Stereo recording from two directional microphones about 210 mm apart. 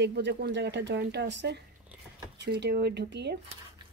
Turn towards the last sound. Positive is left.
turn(degrees=-55)  # may be behind; listen again after turning